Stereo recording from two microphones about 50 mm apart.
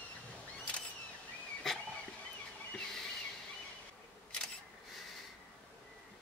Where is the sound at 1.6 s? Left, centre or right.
Centre.